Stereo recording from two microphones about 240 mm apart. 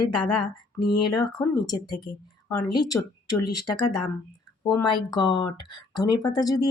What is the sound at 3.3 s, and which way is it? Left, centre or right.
Speech, left.